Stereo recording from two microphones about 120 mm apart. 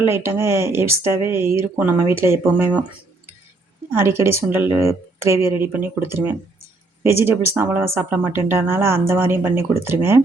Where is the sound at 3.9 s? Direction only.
20° right (ahead or behind).